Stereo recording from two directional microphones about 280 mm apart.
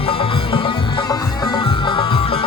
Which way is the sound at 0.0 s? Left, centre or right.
Centre.